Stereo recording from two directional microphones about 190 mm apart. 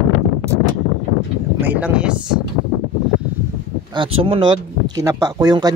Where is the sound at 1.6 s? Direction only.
10° right (ahead or behind).